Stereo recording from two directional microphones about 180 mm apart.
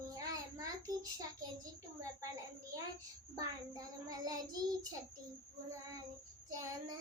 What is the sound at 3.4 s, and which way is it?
Child singing, 20° right (ahead or behind).